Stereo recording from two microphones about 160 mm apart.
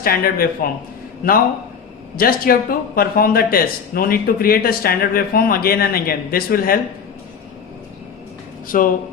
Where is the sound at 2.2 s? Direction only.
65° left (ahead or behind).